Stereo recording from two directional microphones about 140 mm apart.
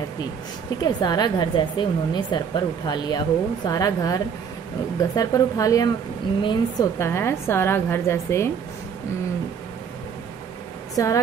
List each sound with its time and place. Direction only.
0.8 s a woman's voice: 30° left (ahead or behind)
7.0 s a woman's voice: 20° left (ahead or behind)
11.0 s a woman's voice: 25° left (ahead or behind)